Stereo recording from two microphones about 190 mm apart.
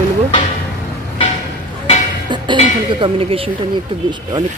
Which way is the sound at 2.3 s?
25° right (ahead or behind).